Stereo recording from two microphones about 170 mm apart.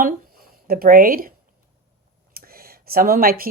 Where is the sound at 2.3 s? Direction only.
60° right (ahead or behind).